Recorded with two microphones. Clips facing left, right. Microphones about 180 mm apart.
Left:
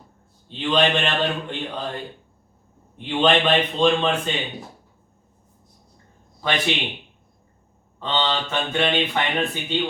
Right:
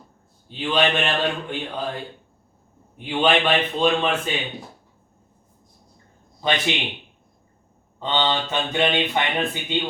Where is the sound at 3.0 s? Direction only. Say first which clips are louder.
Left 1 dB; 10° right (ahead or behind).